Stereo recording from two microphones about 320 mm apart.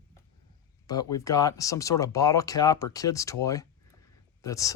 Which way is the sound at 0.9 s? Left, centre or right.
Centre.